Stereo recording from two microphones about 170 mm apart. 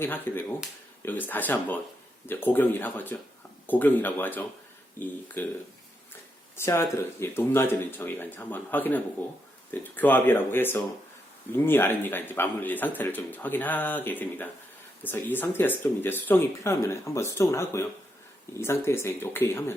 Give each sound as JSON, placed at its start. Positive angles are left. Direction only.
{"t": 0.0, "sound": "a man's voice", "side_deg": 10}
{"t": 6.6, "sound": "a man's voice", "side_deg": 15}